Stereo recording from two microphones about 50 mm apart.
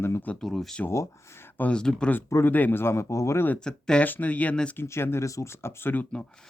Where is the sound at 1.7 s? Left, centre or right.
Centre.